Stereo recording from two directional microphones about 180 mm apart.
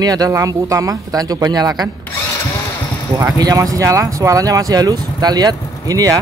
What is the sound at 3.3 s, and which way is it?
Speech, 20° right (ahead or behind).